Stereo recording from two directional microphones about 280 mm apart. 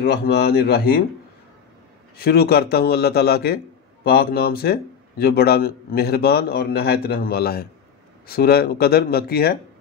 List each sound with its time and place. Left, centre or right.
0.0 s a man's voice: left
2.1 s a man's voice: left